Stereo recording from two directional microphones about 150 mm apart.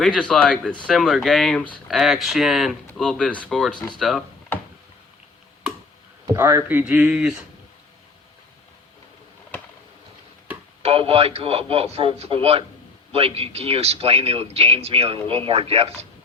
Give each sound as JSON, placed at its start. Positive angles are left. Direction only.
{"t": 0.0, "sound": "speech", "side_deg": 5}
{"t": 6.3, "sound": "speech", "side_deg": -15}
{"t": 10.8, "sound": "a man's voice", "side_deg": -40}